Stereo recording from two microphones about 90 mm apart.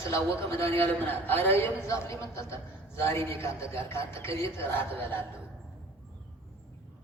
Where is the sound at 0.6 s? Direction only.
90° right.